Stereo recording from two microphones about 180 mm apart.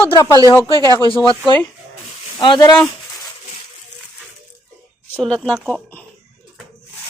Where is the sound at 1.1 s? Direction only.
25° left (ahead or behind).